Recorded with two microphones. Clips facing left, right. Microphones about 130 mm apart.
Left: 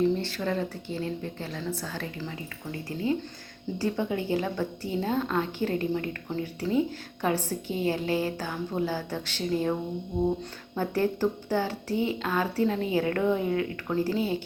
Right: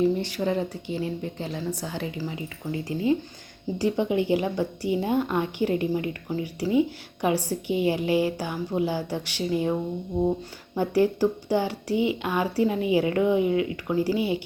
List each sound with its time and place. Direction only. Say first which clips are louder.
0.0 s a woman's voice: right 2 dB; 15° right (ahead or behind)
10.8 s a woman's voice: right 5 dB; 15° right (ahead or behind)